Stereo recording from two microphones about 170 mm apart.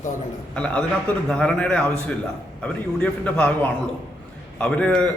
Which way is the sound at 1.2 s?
5° left (ahead or behind).